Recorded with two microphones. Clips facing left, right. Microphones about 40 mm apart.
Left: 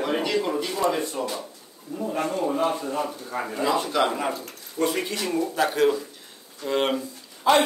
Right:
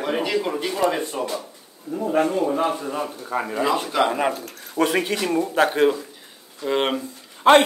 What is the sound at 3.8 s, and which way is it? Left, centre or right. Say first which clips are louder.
Speech: right 2 dB; centre.